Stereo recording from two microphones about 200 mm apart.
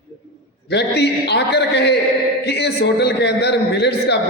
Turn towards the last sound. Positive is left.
turn(degrees=55)  # may be behind; listen again after turning